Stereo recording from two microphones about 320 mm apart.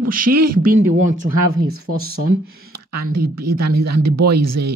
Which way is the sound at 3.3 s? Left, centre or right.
Right.